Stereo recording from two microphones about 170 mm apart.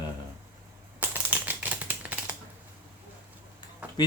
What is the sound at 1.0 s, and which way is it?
Typing, 10° right (ahead or behind).